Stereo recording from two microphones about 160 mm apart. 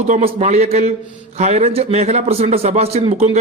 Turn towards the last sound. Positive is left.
turn(degrees=-40)  # may be behind; listen again after turning